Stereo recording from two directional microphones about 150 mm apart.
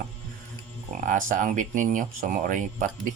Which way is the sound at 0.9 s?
60° right (ahead or behind).